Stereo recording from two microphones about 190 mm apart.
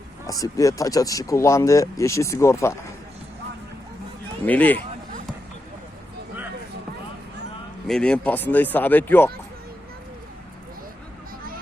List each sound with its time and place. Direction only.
0.3 s speech: 20° left (ahead or behind)
4.4 s speech: 10° left (ahead or behind)
7.9 s speech: 5° left (ahead or behind)